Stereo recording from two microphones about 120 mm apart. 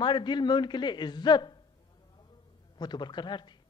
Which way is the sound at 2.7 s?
35° left (ahead or behind).